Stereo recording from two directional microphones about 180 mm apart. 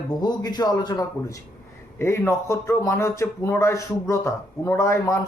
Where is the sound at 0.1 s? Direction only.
20° left (ahead or behind).